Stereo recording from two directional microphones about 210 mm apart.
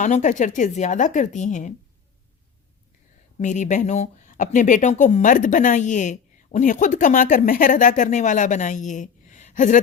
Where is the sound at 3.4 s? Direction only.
35° left (ahead or behind).